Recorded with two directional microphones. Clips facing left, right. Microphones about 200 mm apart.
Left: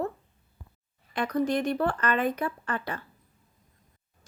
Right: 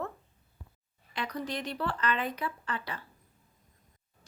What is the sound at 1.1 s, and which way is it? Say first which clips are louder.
Speech: left 9 dB; 50° left (ahead or behind).